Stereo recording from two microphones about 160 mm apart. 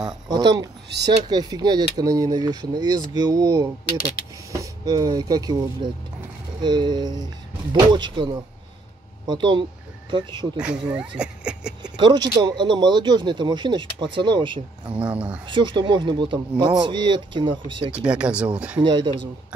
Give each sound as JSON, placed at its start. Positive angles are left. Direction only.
{"t": 0.0, "sound": "speech", "side_deg": -25}
{"t": 0.8, "sound": "speech", "side_deg": -90}
{"t": 1.3, "sound": "speech", "side_deg": -25}
{"t": 10.6, "sound": "speech", "side_deg": -5}
{"t": 11.8, "sound": "speech", "side_deg": -25}
{"t": 14.9, "sound": "speech", "side_deg": -5}
{"t": 15.4, "sound": "speech", "side_deg": -30}
{"t": 17.9, "sound": "speech", "side_deg": -5}
{"t": 18.8, "sound": "speech", "side_deg": -30}